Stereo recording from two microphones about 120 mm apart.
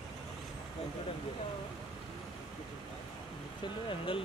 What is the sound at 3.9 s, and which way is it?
Speech, 45° left (ahead or behind).